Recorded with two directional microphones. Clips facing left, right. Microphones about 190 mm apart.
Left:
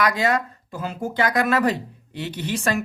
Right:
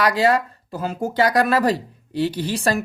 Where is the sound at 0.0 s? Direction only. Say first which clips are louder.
Right 3 dB; 30° right (ahead or behind).